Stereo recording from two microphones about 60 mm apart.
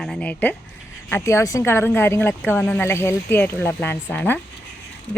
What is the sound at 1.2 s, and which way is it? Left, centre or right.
Speech, left.